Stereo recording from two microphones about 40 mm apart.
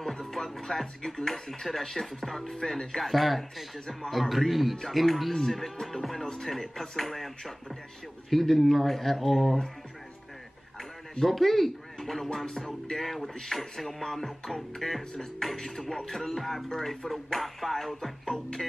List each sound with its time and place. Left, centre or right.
0.0 s speech: centre
2.2 s music: centre
3.0 s speech: centre
5.5 s music: centre
8.3 s speech: centre
11.1 s music: centre
13.0 s music: centre
17.1 s speech: centre
18.2 s music: centre